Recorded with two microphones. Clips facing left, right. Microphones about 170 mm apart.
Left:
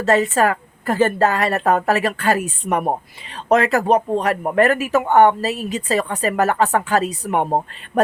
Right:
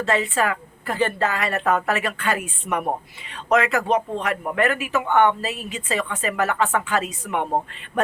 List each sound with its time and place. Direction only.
0.0 s speech: 40° left (ahead or behind)